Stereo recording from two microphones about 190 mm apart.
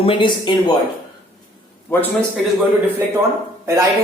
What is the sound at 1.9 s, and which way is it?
Speech, 10° left (ahead or behind).